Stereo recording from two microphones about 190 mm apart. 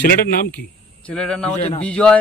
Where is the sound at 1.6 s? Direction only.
35° left (ahead or behind).